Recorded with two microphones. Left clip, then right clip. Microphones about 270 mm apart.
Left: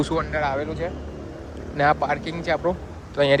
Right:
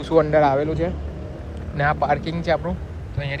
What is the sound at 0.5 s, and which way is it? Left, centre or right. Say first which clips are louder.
Speech: right 5 dB; right.